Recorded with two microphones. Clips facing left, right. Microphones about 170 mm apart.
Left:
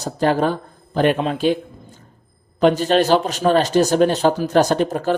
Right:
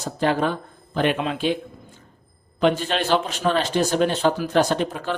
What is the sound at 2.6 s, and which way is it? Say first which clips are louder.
Speech: left 6 dB; 40° left (ahead or behind).